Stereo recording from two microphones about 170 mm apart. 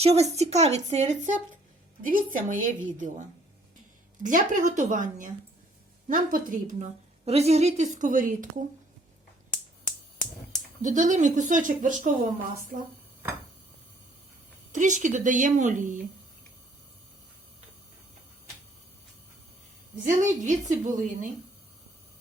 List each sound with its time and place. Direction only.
0.0 s a woman's voice: 40° right (ahead or behind)
10.8 s a woman's voice: 45° right (ahead or behind)
14.7 s a woman's voice: 50° right (ahead or behind)
20.1 s a woman's voice: 45° right (ahead or behind)